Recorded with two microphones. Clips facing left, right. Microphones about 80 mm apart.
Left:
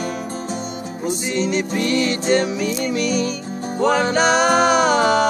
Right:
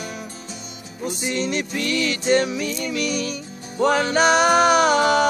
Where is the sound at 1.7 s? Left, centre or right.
Left.